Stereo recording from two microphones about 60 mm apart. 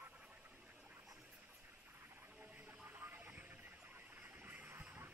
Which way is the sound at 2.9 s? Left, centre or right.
Right.